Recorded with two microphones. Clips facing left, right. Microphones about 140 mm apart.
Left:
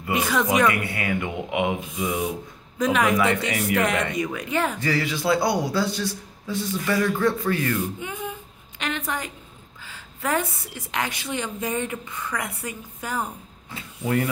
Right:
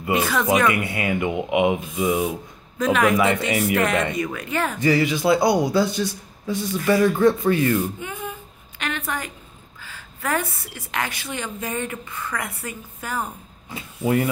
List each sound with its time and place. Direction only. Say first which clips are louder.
0.2 s speech: right 1 dB; 15° left (ahead or behind)
0.7 s speech: right 2 dB; 20° right (ahead or behind)
2.8 s speech: right 2 dB; 15° left (ahead or behind)
3.2 s speech: right 2 dB; 20° right (ahead or behind)
4.1 s speech: even; 15° left (ahead or behind)
4.7 s speech: right 6 dB; 20° right (ahead or behind)
8.0 s speech: even; 20° left (ahead or behind)
8.7 s a sound: even; 20° left (ahead or behind)
9.8 s a woman's voice: even; 20° left (ahead or behind)
13.7 s speech: right 4 dB; 15° right (ahead or behind)